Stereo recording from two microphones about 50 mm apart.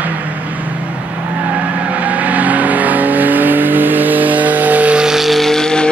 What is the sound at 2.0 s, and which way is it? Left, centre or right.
Vehicle, right.